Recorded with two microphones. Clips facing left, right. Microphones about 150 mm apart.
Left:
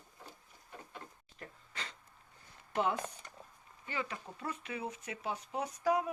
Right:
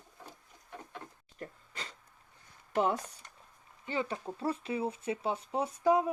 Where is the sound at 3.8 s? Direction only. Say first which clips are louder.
Right 6 dB; 30° right (ahead or behind).